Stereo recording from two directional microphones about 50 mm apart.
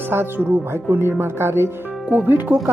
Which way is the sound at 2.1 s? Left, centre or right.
Right.